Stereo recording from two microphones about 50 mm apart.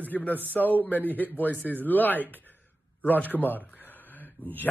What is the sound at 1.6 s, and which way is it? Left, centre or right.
Speech, right.